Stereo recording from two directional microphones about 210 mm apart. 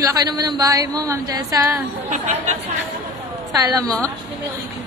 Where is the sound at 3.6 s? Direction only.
15° right (ahead or behind).